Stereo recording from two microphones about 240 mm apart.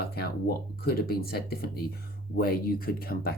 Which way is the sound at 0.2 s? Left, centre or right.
Left.